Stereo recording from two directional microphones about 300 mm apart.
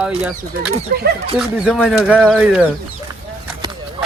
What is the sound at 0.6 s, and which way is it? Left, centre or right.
Speech, right.